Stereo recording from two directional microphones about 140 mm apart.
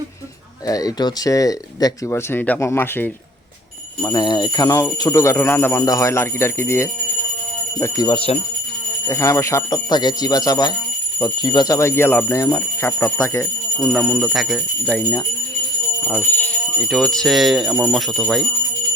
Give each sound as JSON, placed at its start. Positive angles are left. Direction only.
{"t": 0.7, "sound": "speech", "side_deg": 25}
{"t": 4.0, "sound": "speech", "side_deg": 30}
{"t": 4.6, "sound": "speech", "side_deg": 20}
{"t": 8.1, "sound": "speech", "side_deg": 40}
{"t": 9.0, "sound": "speech", "side_deg": 20}
{"t": 13.9, "sound": "speech", "side_deg": 0}
{"t": 16.0, "sound": "speech", "side_deg": 15}
{"t": 16.9, "sound": "speech", "side_deg": 5}